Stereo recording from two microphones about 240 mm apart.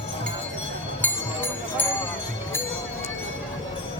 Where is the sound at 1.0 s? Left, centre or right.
Centre.